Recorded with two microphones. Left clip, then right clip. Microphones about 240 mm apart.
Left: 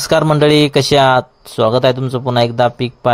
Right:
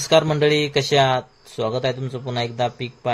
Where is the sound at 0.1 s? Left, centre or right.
Left.